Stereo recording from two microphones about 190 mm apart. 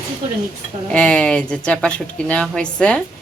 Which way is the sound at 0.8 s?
5° left (ahead or behind).